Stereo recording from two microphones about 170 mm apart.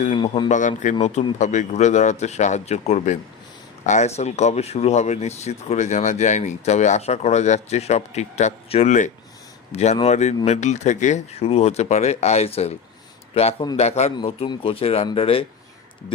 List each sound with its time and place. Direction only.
0.2 s a man's voice: 30° left (ahead or behind)
1.0 s speech: 45° left (ahead or behind)